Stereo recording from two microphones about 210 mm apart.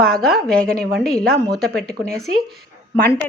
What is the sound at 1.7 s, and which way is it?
Speech, 5° left (ahead or behind).